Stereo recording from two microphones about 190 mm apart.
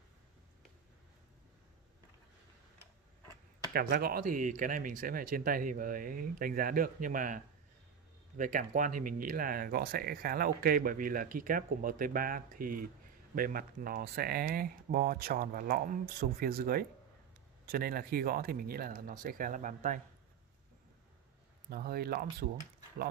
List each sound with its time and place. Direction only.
3.7 s speech: 50° right (ahead or behind)
21.6 s speech: 55° right (ahead or behind)